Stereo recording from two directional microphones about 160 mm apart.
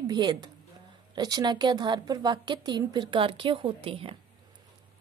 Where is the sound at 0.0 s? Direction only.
25° right (ahead or behind).